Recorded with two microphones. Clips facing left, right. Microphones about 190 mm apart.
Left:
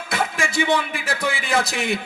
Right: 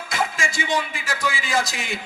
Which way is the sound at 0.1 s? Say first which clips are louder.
Left 2 dB; 60° left (ahead or behind).